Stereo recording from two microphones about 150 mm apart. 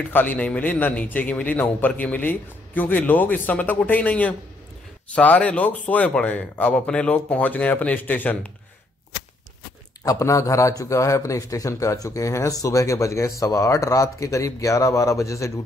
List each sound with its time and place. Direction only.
0.1 s a man's voice: 10° left (ahead or behind)
10.0 s speech: 20° left (ahead or behind)